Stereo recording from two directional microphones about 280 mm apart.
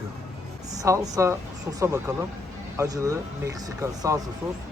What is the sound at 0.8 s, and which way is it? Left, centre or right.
Speech, centre.